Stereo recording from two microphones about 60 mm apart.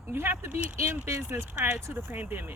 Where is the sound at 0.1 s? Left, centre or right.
Right.